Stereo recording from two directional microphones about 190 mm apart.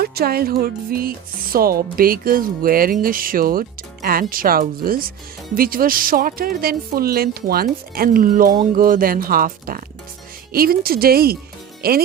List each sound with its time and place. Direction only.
0.0 s speech: 55° right (ahead or behind)